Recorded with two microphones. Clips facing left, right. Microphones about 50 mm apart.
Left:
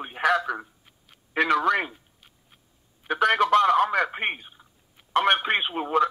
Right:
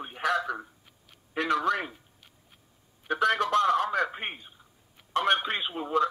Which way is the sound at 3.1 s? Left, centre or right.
Left.